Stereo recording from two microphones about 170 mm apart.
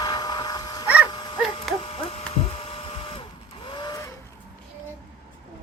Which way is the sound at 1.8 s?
35° left (ahead or behind).